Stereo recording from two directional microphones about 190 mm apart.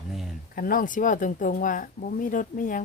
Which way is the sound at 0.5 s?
45° left (ahead or behind).